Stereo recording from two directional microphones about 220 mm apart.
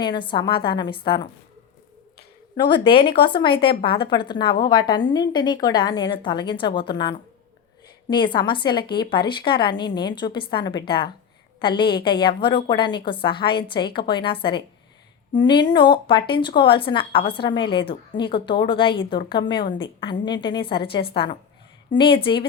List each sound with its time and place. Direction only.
0.0 s speech: 20° left (ahead or behind)
2.8 s speech: 20° left (ahead or behind)
15.4 s speech: 20° left (ahead or behind)